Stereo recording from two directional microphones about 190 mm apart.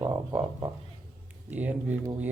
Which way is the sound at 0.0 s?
15° right (ahead or behind).